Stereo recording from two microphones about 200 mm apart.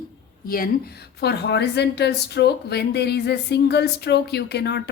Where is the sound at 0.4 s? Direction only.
45° left (ahead or behind).